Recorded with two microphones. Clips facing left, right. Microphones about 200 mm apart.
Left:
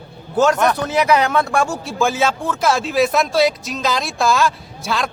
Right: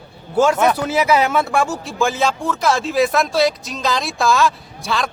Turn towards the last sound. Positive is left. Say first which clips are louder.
# even
turn(degrees=0)  # may be behind; listen again after turning